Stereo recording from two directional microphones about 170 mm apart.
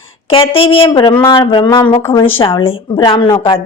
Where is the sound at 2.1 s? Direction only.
30° left (ahead or behind).